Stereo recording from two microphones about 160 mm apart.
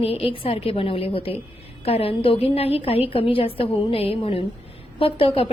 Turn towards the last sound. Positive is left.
turn(degrees=35)  # may be behind; listen again after turning